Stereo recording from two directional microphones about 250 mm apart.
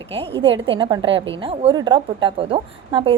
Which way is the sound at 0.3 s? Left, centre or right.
Centre.